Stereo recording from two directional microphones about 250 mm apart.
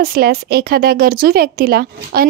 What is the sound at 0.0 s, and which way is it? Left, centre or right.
Speech, right.